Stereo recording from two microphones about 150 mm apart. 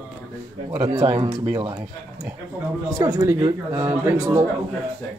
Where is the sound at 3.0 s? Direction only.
25° right (ahead or behind).